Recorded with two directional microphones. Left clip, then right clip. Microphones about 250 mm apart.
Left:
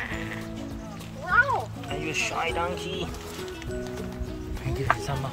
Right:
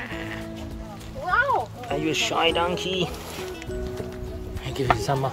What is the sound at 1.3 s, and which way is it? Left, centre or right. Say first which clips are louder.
Music: left 1 dB; right.